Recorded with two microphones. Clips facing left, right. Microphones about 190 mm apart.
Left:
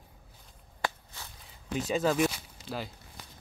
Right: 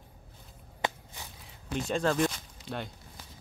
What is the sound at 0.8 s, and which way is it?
Walk, 15° right (ahead or behind).